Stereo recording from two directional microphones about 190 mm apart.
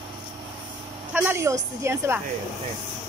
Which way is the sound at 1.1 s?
10° right (ahead or behind).